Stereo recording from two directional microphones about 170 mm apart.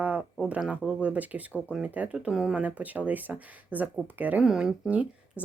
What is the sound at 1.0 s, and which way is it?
Speech, 10° right (ahead or behind).